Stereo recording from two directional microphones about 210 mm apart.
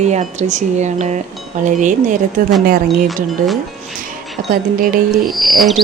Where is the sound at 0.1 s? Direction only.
35° right (ahead or behind).